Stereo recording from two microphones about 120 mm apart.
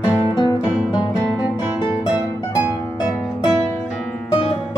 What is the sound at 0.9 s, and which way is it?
Music, 35° left (ahead or behind).